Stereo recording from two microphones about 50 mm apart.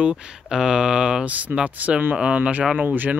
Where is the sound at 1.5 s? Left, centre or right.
Right.